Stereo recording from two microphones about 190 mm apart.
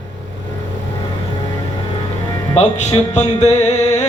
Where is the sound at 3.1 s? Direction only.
35° left (ahead or behind).